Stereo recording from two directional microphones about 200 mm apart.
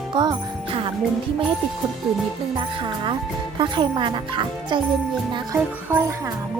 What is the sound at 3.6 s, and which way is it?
Speech, 25° right (ahead or behind).